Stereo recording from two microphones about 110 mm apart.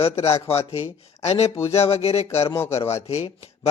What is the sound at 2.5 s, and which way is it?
Speech, 25° left (ahead or behind).